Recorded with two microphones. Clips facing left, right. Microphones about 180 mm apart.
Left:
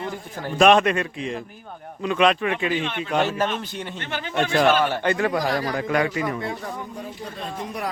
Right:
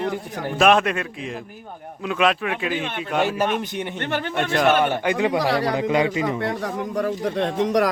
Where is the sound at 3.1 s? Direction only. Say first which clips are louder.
Right 2 dB; 10° right (ahead or behind).